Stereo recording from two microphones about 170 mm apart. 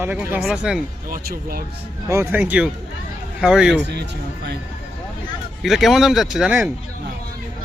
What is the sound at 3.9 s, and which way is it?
Speech, 80° right.